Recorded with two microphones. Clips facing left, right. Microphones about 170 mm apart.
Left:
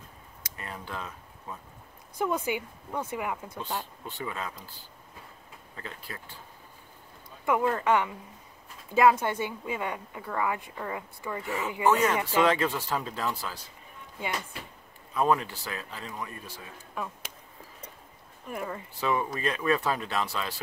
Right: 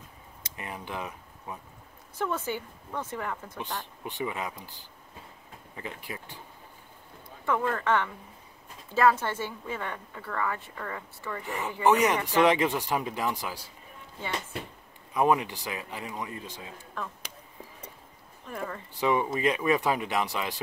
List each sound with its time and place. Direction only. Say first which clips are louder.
0.4 s a sound: right 2 dB; 15° right (ahead or behind)
2.1 s a woman's voice: left 2 dB; 15° left (ahead or behind)
4.0 s speech: right 3 dB; 15° right (ahead or behind)
7.4 s a woman's voice: left 2 dB; 15° left (ahead or behind)
11.4 s speech: right 1 dB; 15° right (ahead or behind)
15.1 s speech: right 1 dB; 15° right (ahead or behind)
16.9 s speech: left 2 dB; 10° left (ahead or behind)
18.5 s a woman's voice: left 1 dB; 10° left (ahead or behind)
18.9 s speech: right 3 dB; 15° right (ahead or behind)